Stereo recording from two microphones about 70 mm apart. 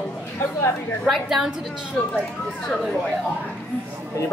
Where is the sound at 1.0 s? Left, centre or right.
Centre.